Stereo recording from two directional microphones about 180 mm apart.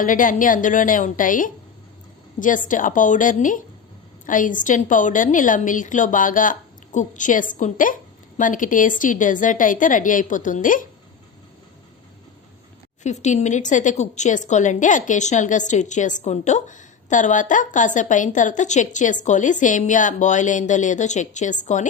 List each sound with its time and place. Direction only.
0.0 s speech: 50° left (ahead or behind)
13.0 s speech: 40° left (ahead or behind)